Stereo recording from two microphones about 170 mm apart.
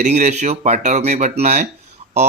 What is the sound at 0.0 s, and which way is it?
Speech, 45° right (ahead or behind).